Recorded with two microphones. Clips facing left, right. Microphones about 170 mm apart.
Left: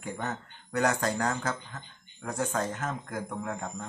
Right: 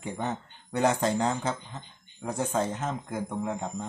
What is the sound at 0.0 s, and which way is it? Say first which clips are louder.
Speech: right 3 dB; 20° right (ahead or behind).